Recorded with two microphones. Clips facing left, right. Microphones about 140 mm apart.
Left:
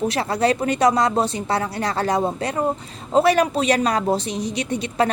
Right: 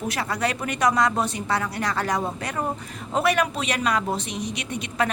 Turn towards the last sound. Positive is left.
turn(degrees=35)  # may be behind; listen again after turning